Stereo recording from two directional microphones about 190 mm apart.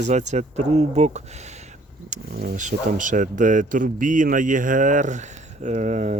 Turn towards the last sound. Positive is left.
turn(degrees=-40)  # may be behind; listen again after turning